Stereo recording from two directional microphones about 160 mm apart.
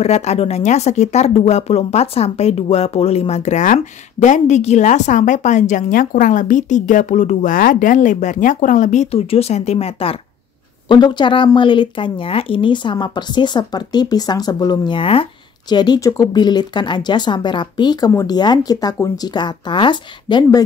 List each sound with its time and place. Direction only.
0.0 s speech: 40° left (ahead or behind)